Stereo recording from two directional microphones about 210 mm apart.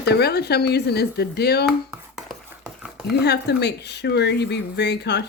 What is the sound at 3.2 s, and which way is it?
Speech, 55° left (ahead or behind).